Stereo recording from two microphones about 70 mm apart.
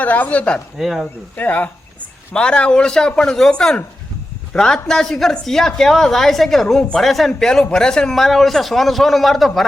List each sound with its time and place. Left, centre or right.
0.0 s speech: left
0.8 s a man's voice: centre
1.4 s a man's voice: left; by 9.6 s centre